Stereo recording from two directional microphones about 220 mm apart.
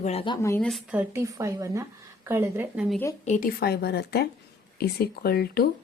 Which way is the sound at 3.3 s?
40° left (ahead or behind).